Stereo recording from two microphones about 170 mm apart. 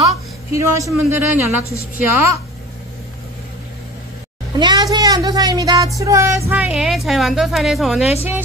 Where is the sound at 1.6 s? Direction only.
20° left (ahead or behind).